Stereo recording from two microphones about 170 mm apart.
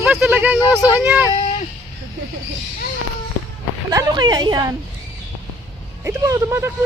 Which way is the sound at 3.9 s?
20° right (ahead or behind).